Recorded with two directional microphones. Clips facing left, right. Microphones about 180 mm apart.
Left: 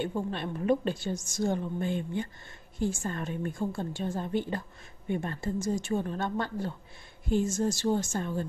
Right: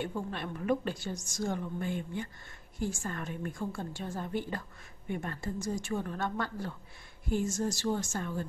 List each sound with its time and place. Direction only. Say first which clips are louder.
0.0 s a woman's voice: left 4 dB; 25° left (ahead or behind)